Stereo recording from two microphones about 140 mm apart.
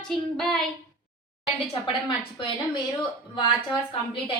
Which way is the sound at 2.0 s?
35° left (ahead or behind).